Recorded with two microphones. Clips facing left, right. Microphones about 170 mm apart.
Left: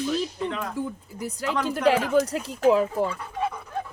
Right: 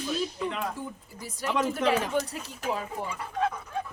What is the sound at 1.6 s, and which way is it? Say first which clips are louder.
Speech: left 6 dB; 85° left.